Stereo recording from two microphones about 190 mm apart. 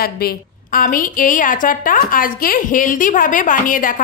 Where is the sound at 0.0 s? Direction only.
55° left (ahead or behind).